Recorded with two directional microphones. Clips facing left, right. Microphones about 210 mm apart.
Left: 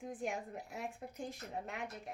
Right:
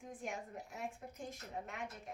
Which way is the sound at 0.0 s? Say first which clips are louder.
Left 5 dB; 35° left (ahead or behind).